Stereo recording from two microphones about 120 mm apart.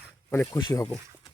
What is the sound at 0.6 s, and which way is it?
Speech, 30° left (ahead or behind).